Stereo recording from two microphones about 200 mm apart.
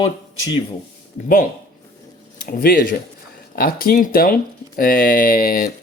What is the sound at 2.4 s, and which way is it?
Speech, 45° left (ahead or behind).